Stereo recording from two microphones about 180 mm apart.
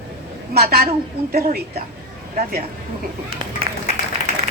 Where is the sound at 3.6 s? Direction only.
30° right (ahead or behind).